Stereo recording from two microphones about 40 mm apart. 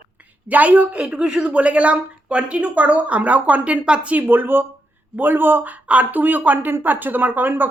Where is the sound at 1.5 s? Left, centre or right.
Right.